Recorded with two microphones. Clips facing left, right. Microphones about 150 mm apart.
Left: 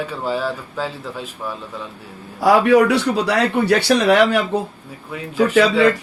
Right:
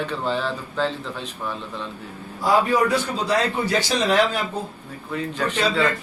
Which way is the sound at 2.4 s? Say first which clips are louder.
Left 6 dB; 80° left.